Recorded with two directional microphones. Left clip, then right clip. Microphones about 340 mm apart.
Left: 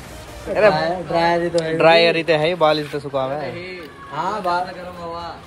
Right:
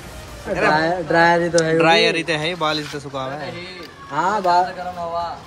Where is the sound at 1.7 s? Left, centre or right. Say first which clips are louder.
Left 4 dB; centre.